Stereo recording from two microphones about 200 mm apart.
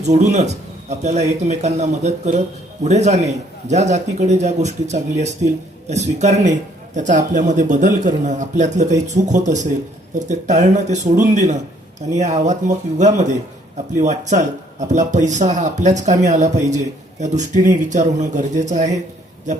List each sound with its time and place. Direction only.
0.0 s speech: 35° right (ahead or behind)